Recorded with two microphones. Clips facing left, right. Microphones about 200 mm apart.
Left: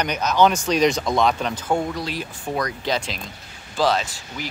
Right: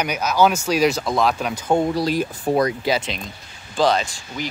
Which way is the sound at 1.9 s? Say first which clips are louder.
Right 8 dB; 40° right (ahead or behind).